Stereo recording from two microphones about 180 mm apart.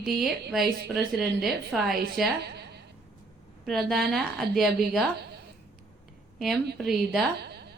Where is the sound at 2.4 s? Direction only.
65° right (ahead or behind).